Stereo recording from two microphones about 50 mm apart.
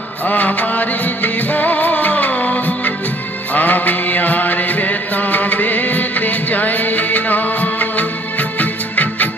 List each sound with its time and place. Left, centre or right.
0.3 s music: left
3.5 s mantra: left